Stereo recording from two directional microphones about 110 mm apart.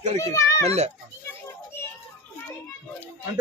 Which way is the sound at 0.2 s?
30° left (ahead or behind).